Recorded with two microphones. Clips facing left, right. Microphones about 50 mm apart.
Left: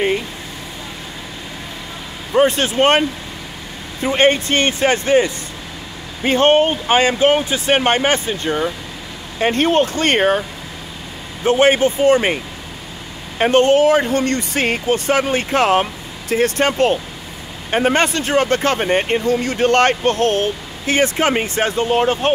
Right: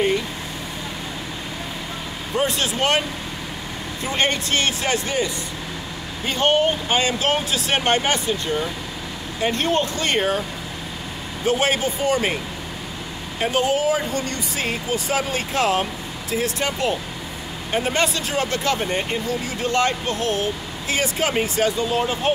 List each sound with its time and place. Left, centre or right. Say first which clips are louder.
2.3 s speech: left 8 dB; left
4.0 s speech: left 8 dB; left
11.4 s speech: left 7 dB; left
13.4 s speech: left 8 dB; left
19.4 s speech: left 6 dB; left